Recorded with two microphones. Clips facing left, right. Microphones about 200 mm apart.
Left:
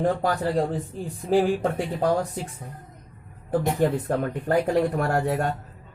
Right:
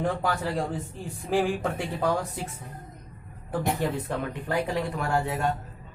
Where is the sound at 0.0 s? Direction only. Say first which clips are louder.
Left 4 dB; 35° left (ahead or behind).